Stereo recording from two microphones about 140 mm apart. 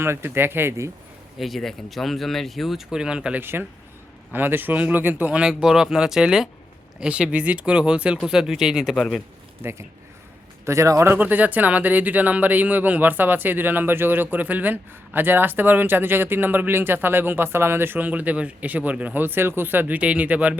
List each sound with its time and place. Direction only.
0.0 s speech: 15° right (ahead or behind)
1.4 s speech: centre (ahead or behind)
9.6 s speech: 15° right (ahead or behind)